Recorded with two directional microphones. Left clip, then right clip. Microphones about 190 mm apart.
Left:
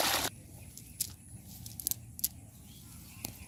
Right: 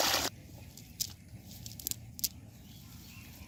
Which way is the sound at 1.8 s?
Centre (ahead or behind).